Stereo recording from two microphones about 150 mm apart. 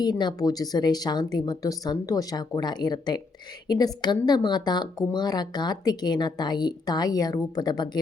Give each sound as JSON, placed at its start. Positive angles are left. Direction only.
{"t": 0.0, "sound": "a woman's voice", "side_deg": 30}